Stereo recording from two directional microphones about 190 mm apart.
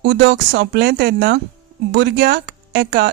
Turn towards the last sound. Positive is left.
turn(degrees=-55)  # may be behind; listen again after turning